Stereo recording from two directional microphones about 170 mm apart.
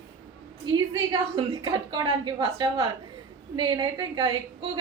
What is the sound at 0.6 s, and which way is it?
A woman's voice, 25° right (ahead or behind).